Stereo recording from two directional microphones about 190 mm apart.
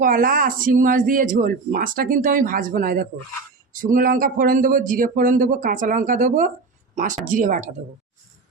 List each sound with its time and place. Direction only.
0.0 s speech: 45° right (ahead or behind)